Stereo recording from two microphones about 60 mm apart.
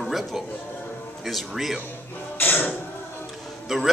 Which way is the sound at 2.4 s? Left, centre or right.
Left.